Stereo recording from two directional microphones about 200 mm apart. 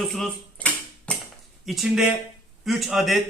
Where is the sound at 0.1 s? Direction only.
5° left (ahead or behind).